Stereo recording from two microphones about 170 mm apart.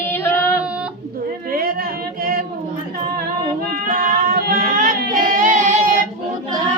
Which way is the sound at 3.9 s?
55° right (ahead or behind).